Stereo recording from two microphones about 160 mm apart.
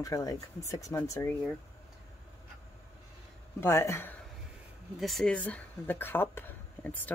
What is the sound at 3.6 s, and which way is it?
Speech, 15° left (ahead or behind).